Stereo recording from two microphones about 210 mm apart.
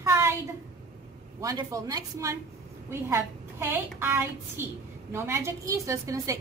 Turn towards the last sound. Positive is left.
turn(degrees=-15)  # may be behind; listen again after turning